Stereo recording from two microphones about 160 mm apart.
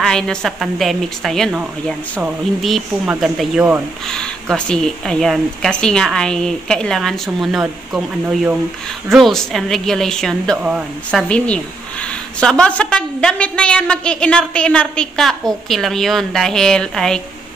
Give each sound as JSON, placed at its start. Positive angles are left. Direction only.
{"t": 0.0, "sound": "a woman's voice", "side_deg": 5}
{"t": 9.1, "sound": "a woman's voice", "side_deg": 0}